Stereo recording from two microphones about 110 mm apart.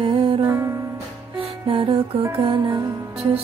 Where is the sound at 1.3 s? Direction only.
55° right (ahead or behind).